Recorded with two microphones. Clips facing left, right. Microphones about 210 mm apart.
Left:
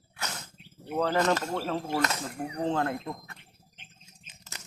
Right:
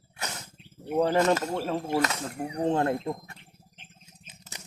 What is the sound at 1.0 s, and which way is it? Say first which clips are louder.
Speech: right 3 dB; 20° right (ahead or behind).